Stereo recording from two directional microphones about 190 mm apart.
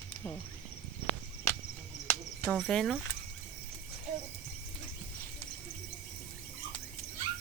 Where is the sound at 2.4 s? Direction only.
Centre (ahead or behind).